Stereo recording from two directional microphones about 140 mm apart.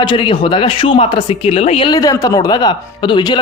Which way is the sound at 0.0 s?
35° left (ahead or behind).